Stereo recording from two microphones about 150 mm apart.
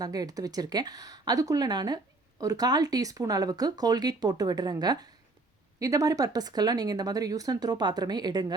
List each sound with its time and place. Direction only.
0.0 s speech: 25° right (ahead or behind)